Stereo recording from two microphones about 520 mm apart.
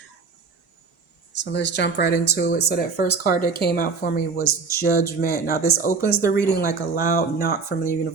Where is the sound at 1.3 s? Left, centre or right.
Centre.